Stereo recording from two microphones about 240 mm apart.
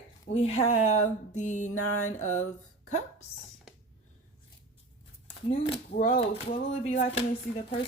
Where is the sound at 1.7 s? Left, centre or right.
Left.